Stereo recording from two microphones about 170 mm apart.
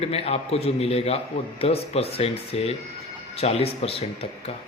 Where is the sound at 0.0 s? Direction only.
35° left (ahead or behind).